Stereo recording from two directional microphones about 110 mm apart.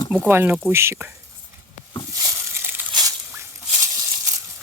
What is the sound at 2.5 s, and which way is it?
Crumpling, 20° right (ahead or behind).